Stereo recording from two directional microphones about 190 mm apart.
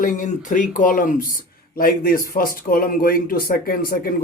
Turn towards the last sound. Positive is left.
turn(degrees=50)  # may be behind; listen again after turning